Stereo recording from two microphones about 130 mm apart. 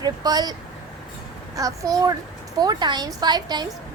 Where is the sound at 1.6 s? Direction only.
25° right (ahead or behind).